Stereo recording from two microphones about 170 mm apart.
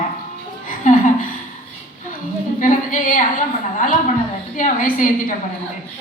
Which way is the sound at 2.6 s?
50° left (ahead or behind).